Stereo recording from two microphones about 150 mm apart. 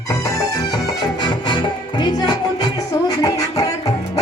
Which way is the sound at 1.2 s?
30° left (ahead or behind).